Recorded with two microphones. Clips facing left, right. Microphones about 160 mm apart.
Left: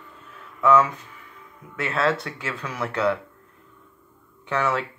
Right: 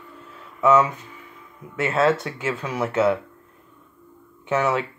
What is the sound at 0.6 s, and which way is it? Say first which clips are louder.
Speech: right 1 dB; 20° right (ahead or behind).